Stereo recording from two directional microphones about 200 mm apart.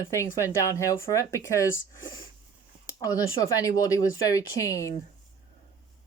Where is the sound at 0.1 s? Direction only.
15° left (ahead or behind).